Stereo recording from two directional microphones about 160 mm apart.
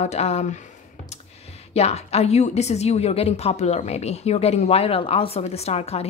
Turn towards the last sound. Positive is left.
turn(degrees=40)  # may be behind; listen again after turning